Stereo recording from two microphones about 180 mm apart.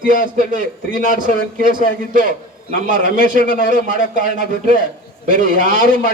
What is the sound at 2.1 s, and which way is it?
A man's voice, 50° right (ahead or behind).